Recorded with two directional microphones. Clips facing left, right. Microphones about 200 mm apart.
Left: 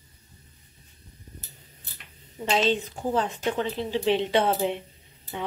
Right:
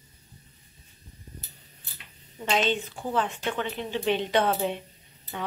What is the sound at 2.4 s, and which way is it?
Speech, 30° left (ahead or behind).